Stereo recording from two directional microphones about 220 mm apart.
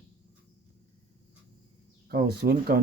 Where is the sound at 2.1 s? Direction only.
45° right (ahead or behind).